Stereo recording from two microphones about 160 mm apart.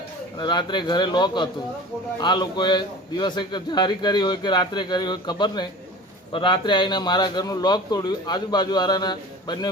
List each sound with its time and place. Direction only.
0.3 s a man's voice: 30° left (ahead or behind)